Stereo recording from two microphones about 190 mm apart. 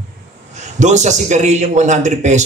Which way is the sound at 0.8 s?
40° right (ahead or behind).